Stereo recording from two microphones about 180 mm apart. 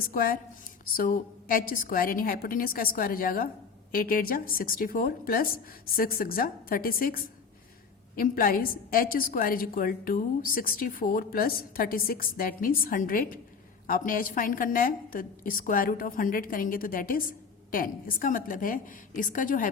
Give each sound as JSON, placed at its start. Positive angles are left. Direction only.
{"t": 0.1, "sound": "a woman's voice", "side_deg": 55}